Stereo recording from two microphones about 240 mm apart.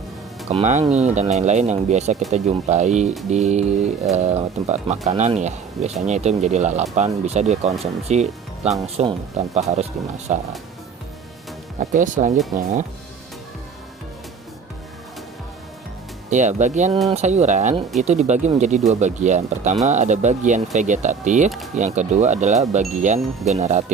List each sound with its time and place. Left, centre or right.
0.5 s speech: right
11.8 s speech: right
16.3 s speech: right